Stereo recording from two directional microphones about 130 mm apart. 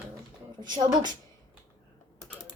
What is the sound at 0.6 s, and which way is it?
Speech, 35° right (ahead or behind).